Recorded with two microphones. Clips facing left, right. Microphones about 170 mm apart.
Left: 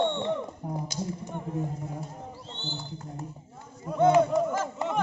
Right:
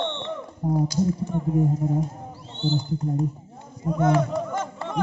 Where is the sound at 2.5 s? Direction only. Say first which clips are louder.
Right 16 dB; 15° right (ahead or behind).